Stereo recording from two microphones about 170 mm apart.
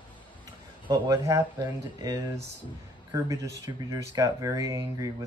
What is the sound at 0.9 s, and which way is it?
Speech, 20° right (ahead or behind).